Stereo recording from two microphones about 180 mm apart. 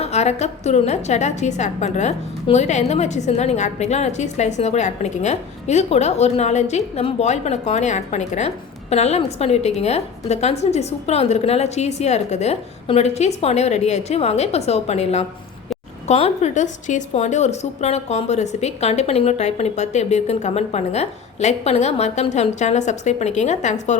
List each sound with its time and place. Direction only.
0.0 s a woman's voice: 35° left (ahead or behind)